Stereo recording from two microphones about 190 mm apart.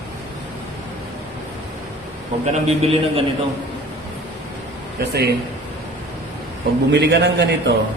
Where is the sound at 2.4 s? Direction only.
30° right (ahead or behind).